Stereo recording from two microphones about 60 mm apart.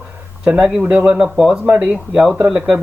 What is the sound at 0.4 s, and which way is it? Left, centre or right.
Speech, centre.